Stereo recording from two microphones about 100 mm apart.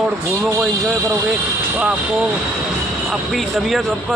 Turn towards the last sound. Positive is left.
turn(degrees=0)  # may be behind; listen again after turning